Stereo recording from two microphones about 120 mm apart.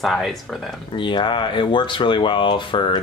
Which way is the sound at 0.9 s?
40° left (ahead or behind).